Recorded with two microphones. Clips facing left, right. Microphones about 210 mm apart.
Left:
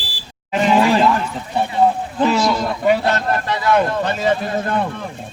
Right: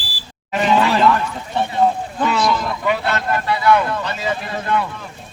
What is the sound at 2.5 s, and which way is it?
Speech, 40° left (ahead or behind).